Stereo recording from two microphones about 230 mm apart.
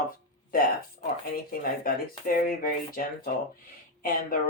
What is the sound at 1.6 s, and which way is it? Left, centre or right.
Speech, left.